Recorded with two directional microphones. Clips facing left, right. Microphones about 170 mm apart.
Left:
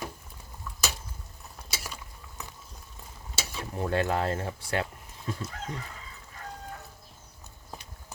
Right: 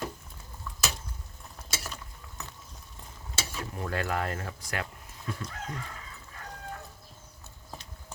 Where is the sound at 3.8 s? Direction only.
30° left (ahead or behind).